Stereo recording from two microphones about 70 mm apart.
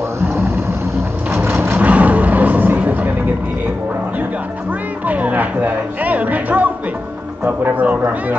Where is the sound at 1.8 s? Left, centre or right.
Right.